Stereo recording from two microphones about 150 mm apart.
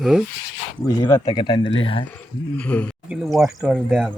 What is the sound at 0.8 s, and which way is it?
Speech, 25° left (ahead or behind).